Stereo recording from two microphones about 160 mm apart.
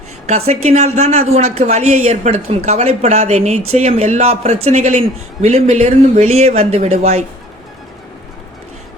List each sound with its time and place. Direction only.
0.3 s speech: 40° right (ahead or behind)